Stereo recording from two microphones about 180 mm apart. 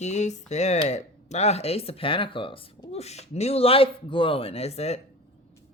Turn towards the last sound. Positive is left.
turn(degrees=35)  # may be behind; listen again after turning